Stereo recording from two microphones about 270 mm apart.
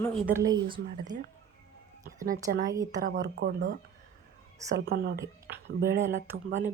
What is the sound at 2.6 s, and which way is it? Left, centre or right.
Speech, centre.